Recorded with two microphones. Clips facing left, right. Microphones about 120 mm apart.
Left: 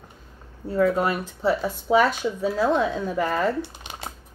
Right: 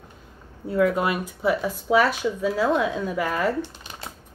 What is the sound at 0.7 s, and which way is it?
Speech, 35° left (ahead or behind).